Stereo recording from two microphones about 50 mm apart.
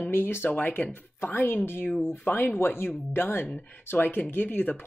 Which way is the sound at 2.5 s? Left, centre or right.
Left.